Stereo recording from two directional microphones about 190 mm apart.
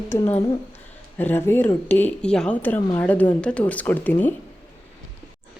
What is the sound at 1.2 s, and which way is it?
Speech, 10° left (ahead or behind).